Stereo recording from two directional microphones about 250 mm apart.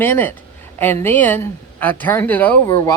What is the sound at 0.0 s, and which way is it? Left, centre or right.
Speech, centre.